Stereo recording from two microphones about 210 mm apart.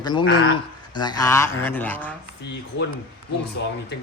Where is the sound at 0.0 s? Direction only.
20° left (ahead or behind).